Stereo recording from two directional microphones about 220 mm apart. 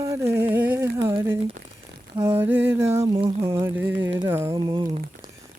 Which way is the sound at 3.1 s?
25° right (ahead or behind).